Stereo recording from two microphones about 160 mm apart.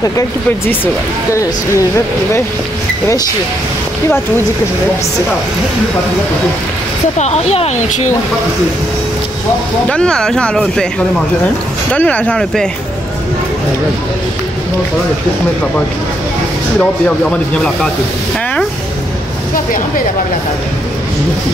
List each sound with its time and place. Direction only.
7.2 s speech: 45° left (ahead or behind)
9.8 s speech: 5° left (ahead or behind)
11.9 s speech: 10° left (ahead or behind)